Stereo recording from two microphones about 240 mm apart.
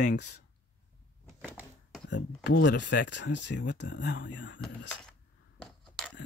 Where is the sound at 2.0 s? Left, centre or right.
Left.